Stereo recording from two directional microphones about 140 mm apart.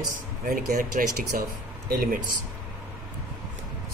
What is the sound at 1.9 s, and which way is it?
Speech, 90° right.